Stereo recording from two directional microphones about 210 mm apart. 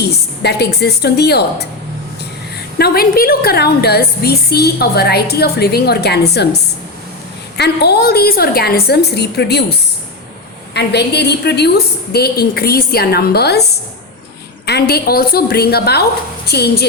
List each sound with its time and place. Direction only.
0.4 s a woman's voice: 50° left (ahead or behind)
2.7 s a woman's voice: 50° left (ahead or behind)
7.5 s a woman's voice: 50° left (ahead or behind)
10.8 s a woman's voice: 50° left (ahead or behind)
14.7 s a woman's voice: 50° left (ahead or behind)